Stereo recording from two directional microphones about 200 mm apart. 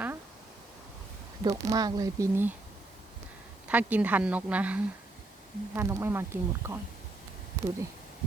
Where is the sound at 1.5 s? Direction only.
15° right (ahead or behind).